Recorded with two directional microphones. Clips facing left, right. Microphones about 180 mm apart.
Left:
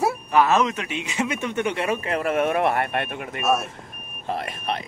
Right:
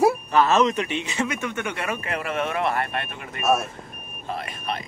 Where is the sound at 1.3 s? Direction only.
30° left (ahead or behind).